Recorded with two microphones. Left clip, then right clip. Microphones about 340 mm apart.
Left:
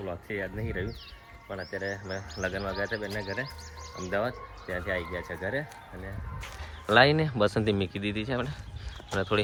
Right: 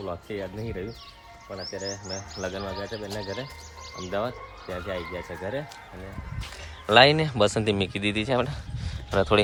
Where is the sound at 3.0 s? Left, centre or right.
Centre.